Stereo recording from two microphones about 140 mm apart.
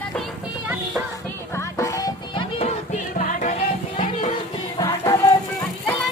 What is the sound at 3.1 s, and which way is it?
Music, 65° left (ahead or behind).